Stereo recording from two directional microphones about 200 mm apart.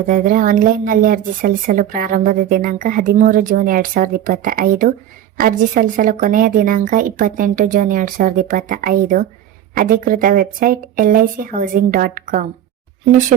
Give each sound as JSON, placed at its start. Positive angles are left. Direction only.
{"t": 0.1, "sound": "speech", "side_deg": -40}